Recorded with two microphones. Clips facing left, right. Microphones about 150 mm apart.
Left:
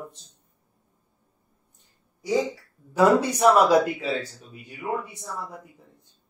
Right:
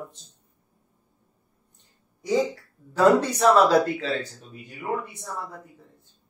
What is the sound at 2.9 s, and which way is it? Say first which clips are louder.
Speech: even; 10° left (ahead or behind).